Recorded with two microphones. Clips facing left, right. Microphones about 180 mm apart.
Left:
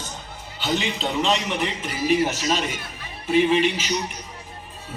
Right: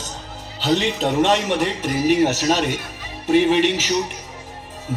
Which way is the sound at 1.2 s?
75° right (ahead or behind).